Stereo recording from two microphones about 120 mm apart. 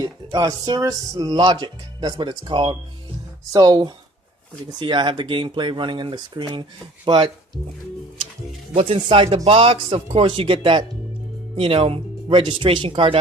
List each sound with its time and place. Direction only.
0.0 s speech: 30° right (ahead or behind); by 7.3 s 45° right (ahead or behind)
8.7 s speech: 55° right (ahead or behind)